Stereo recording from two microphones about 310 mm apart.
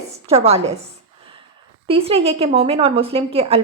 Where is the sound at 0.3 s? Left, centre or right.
Centre.